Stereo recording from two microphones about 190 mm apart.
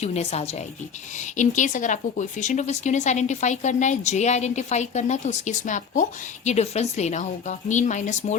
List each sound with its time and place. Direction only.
0.0 s a woman's voice: 35° left (ahead or behind)